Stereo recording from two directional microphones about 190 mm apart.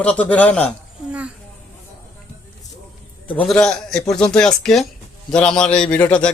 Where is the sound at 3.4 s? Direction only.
5° left (ahead or behind).